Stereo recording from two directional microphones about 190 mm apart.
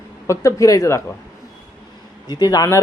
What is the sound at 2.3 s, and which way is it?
Speech, 20° left (ahead or behind).